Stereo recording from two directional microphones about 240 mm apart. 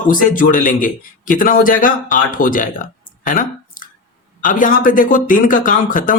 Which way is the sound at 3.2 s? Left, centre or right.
Left.